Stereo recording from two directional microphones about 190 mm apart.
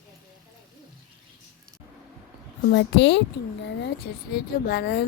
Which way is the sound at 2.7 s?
70° left (ahead or behind).